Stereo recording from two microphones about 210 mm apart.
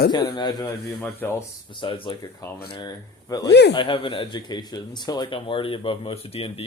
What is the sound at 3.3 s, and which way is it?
Speech, 15° left (ahead or behind).